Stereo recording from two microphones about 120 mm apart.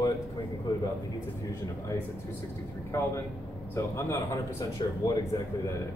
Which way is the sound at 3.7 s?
25° left (ahead or behind).